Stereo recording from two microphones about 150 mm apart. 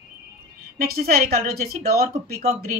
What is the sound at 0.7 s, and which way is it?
A woman's voice, 85° right.